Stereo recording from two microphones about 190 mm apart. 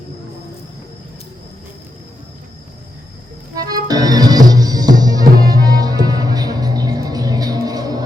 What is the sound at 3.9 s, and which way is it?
Music, 20° right (ahead or behind).